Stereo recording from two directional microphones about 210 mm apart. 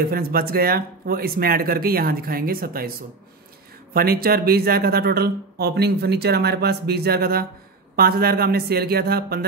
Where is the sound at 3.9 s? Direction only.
45° right (ahead or behind).